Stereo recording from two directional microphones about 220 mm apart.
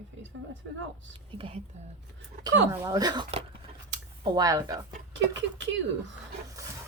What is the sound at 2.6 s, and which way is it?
Speech, 15° right (ahead or behind).